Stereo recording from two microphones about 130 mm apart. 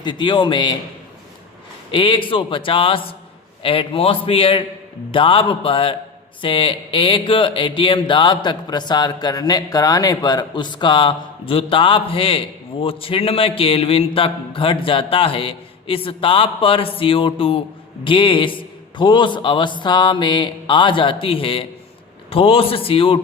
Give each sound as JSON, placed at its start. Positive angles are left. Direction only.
{"t": 0.0, "sound": "mantra", "side_deg": 35}
{"t": 1.9, "sound": "mantra", "side_deg": 40}
{"t": 3.6, "sound": "a man's voice", "side_deg": 45}
{"t": 6.4, "sound": "mantra", "side_deg": 45}
{"t": 12.8, "sound": "a man's voice", "side_deg": 45}
{"t": 18.0, "sound": "mantra", "side_deg": 40}
{"t": 22.3, "sound": "a man's voice", "side_deg": 45}